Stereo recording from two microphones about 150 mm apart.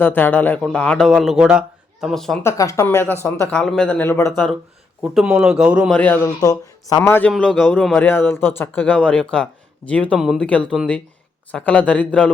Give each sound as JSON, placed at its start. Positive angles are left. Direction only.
{"t": 0.0, "sound": "a man's voice", "side_deg": 15}
{"t": 2.4, "sound": "speech", "side_deg": 20}
{"t": 5.1, "sound": "a man's voice", "side_deg": -5}
{"t": 5.9, "sound": "speech", "side_deg": 10}
{"t": 10.2, "sound": "a man's voice", "side_deg": -5}
{"t": 10.4, "sound": "speech", "side_deg": 10}